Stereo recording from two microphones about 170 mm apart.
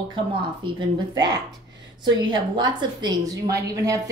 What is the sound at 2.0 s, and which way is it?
A woman's voice, 25° right (ahead or behind).